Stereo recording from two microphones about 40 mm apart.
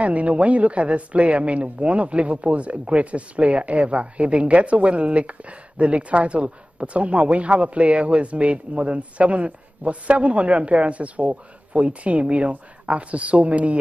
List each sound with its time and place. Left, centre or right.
0.0 s speech: right